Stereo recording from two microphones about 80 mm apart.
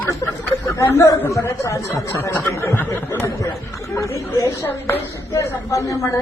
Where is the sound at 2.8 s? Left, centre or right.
Left.